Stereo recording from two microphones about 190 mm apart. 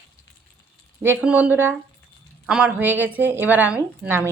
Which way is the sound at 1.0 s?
10° right (ahead or behind).